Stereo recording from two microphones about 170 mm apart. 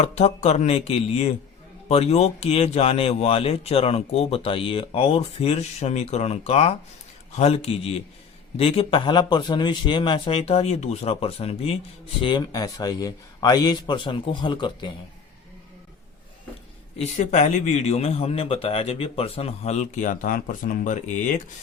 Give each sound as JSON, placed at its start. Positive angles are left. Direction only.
{"t": 0.0, "sound": "a man's voice", "side_deg": 40}
{"t": 17.0, "sound": "speech", "side_deg": 45}